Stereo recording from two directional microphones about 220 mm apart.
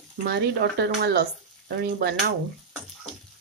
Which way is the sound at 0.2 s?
45° right (ahead or behind).